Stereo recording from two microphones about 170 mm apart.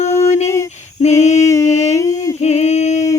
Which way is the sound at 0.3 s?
40° left (ahead or behind).